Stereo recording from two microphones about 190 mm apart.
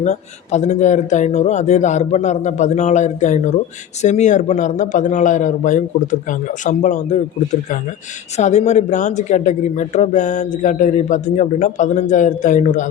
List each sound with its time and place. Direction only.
0.0 s speech: 40° left (ahead or behind)
8.4 s speech: 40° left (ahead or behind)